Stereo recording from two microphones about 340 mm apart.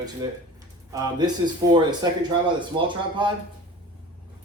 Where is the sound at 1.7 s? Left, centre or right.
Centre.